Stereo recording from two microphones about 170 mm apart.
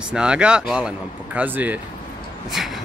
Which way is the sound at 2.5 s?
Centre (ahead or behind).